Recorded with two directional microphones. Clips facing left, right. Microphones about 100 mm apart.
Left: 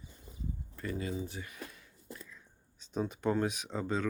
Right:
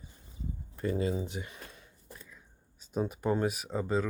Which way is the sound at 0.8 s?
25° right (ahead or behind).